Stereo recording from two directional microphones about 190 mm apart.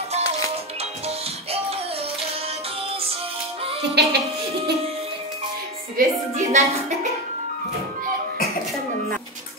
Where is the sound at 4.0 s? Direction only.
60° right (ahead or behind).